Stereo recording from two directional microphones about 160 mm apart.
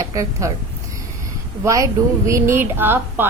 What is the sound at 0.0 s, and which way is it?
Speech, 20° right (ahead or behind).